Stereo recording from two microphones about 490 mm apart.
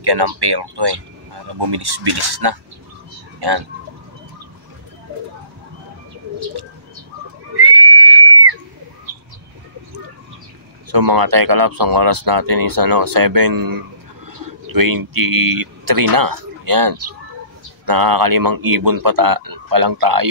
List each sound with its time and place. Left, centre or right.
0.0 s speech: right
7.5 s neigh: right
10.9 s speech: right